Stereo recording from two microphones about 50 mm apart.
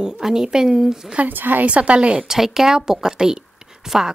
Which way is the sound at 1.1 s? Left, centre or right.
Right.